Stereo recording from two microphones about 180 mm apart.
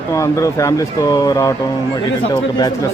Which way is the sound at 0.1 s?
15° left (ahead or behind).